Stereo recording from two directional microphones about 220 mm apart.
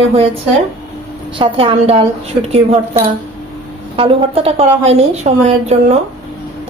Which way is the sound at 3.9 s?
25° right (ahead or behind).